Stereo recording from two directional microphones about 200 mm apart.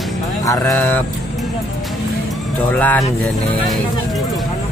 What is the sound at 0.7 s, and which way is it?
Speech, centre (ahead or behind).